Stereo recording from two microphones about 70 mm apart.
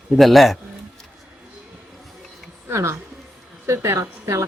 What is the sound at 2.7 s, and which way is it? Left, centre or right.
A woman's voice, right.